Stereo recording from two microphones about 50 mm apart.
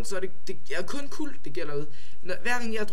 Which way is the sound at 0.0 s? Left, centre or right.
Centre.